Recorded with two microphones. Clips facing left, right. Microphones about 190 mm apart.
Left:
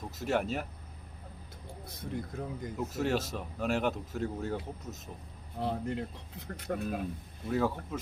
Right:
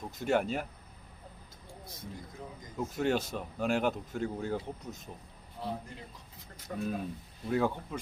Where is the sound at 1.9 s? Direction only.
60° left (ahead or behind).